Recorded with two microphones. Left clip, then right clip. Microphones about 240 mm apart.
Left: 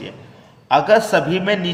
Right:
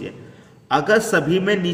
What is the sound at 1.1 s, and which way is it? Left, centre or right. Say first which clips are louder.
Speech: left 1 dB; centre.